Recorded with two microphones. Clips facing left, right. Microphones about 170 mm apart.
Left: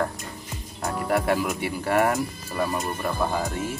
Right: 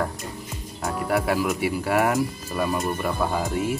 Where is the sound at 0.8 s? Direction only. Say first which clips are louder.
Even; centre (ahead or behind).